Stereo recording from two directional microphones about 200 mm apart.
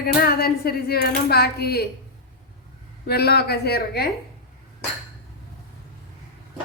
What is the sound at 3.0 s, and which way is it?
Speech, 55° left (ahead or behind).